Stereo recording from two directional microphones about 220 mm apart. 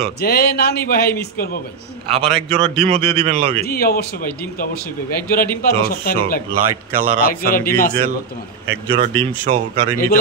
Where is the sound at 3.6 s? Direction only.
45° left (ahead or behind).